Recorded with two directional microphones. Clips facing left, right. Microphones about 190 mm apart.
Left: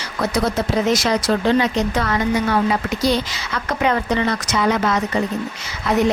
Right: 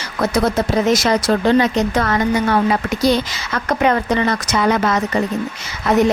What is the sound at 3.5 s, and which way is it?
Speech, 50° right (ahead or behind).